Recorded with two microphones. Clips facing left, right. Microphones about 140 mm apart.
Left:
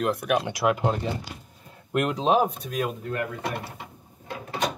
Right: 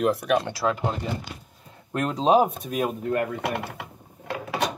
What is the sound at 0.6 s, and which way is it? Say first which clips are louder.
Speech: left 2 dB; 15° left (ahead or behind).